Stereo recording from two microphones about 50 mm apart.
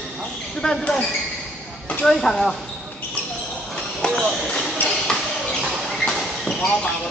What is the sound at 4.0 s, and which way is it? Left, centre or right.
Speech, centre.